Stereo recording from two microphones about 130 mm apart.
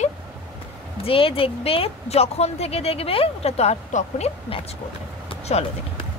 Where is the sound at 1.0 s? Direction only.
45° left (ahead or behind).